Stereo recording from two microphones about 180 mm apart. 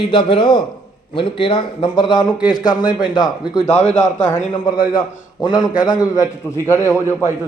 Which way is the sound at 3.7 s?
35° left (ahead or behind).